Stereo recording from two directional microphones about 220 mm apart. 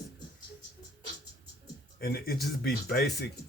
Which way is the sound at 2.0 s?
45° left (ahead or behind).